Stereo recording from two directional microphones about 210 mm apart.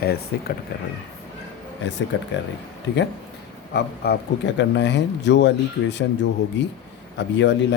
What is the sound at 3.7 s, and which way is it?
Speech, 50° left (ahead or behind).